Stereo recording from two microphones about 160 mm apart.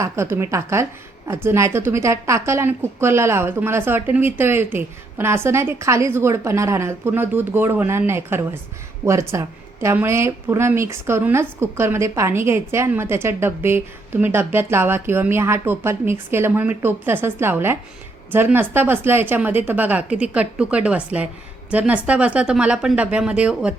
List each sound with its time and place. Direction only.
0.0 s a woman's voice: 15° right (ahead or behind)